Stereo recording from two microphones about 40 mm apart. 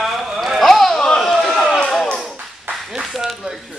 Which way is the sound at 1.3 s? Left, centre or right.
Centre.